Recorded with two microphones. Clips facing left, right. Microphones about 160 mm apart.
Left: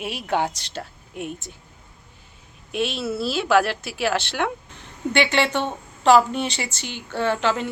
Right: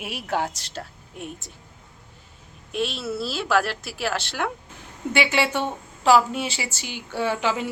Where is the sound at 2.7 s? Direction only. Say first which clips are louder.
Left 2 dB; centre (ahead or behind).